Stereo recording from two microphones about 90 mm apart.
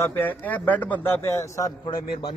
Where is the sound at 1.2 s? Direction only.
35° left (ahead or behind).